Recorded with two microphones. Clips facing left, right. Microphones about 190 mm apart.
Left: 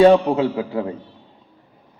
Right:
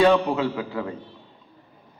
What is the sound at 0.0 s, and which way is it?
Speech, 30° left (ahead or behind).